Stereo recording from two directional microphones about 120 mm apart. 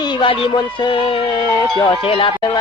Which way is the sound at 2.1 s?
45° left (ahead or behind).